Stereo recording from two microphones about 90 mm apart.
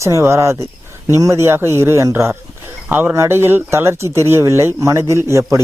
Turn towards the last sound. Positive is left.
turn(degrees=-30)  # may be behind; listen again after turning